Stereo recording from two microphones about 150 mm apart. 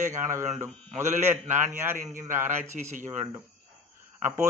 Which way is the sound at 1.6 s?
15° right (ahead or behind).